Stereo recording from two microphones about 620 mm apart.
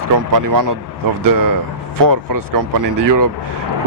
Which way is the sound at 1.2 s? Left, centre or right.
Right.